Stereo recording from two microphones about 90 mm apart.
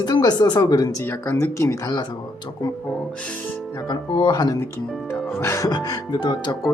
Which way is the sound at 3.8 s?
55° left (ahead or behind).